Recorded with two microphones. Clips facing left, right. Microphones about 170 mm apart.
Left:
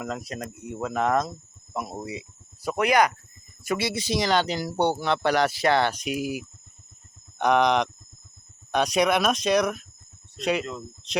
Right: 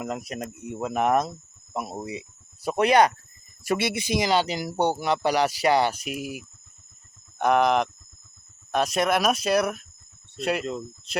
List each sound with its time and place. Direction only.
0.0 s speech: 20° right (ahead or behind)
4.2 s speech: 5° right (ahead or behind)